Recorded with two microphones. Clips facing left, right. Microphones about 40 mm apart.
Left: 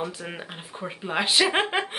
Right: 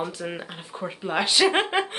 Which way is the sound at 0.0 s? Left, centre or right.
Centre.